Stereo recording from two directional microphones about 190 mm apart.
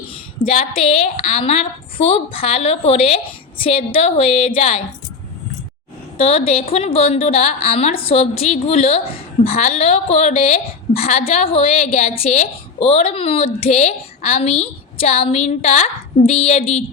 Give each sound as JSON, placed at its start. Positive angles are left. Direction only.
{"t": 0.4, "sound": "a woman's voice", "side_deg": 45}
{"t": 1.0, "sound": "a woman's voice", "side_deg": 30}
{"t": 6.1, "sound": "a woman's voice", "side_deg": 30}